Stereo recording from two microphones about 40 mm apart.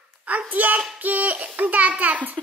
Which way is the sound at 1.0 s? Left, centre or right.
Right.